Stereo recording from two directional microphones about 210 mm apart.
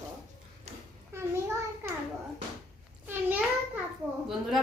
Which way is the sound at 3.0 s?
10° right (ahead or behind).